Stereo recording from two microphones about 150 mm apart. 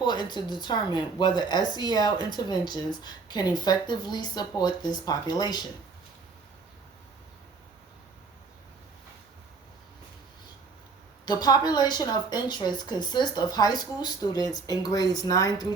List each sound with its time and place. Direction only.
0.0 s speech: 30° left (ahead or behind)
11.3 s speech: 25° left (ahead or behind)